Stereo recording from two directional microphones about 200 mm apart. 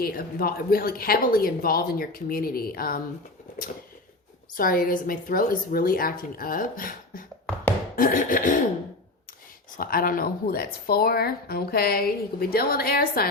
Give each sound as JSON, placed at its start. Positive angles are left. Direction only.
{"t": 0.0, "sound": "speech", "side_deg": 50}
{"t": 4.5, "sound": "speech", "side_deg": 45}
{"t": 7.9, "sound": "music", "side_deg": 40}
{"t": 9.7, "sound": "speech", "side_deg": 45}